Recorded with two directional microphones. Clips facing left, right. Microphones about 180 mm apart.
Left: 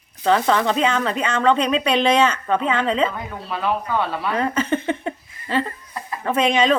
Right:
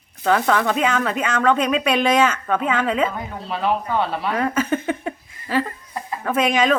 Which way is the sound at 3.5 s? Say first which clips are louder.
Right 1 dB; 20° right (ahead or behind).